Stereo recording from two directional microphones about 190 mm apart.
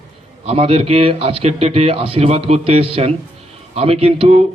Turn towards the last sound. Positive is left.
turn(degrees=-30)  # may be behind; listen again after turning